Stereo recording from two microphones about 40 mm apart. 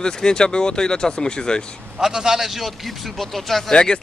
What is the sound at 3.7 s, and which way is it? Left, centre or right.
Speech, left.